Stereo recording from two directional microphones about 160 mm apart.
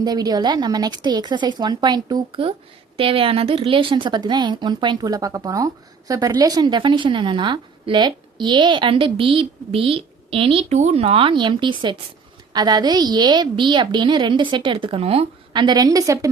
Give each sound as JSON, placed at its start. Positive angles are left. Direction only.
{"t": 0.0, "sound": "a woman's voice", "side_deg": -25}